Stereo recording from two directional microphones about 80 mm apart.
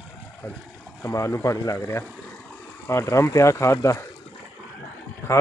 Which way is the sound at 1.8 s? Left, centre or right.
Left.